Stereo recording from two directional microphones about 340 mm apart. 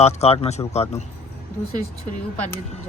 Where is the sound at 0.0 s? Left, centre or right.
Centre.